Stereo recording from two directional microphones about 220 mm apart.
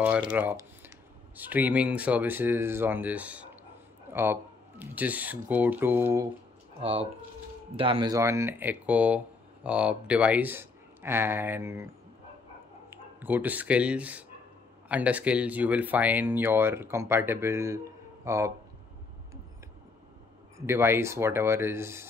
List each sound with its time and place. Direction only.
0.3 s speech: 10° right (ahead or behind)
6.8 s speech: 25° right (ahead or behind)
12.9 s speech: 10° right (ahead or behind)
20.5 s speech: 10° right (ahead or behind)